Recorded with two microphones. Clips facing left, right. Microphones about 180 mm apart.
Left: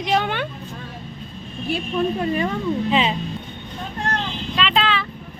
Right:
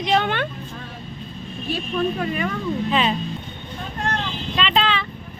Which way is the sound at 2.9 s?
20° left (ahead or behind).